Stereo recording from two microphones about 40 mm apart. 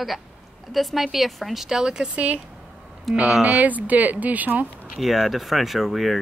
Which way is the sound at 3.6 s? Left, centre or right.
Right.